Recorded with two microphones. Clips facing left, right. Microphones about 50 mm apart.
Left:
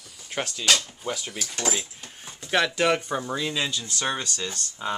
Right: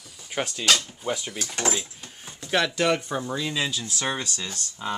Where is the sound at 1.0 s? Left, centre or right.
Centre.